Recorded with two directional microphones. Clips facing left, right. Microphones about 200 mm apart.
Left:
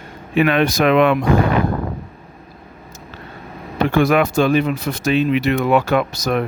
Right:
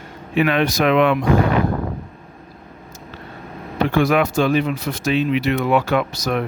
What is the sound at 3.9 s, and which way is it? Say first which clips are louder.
Speech: left 2 dB; 50° left (ahead or behind).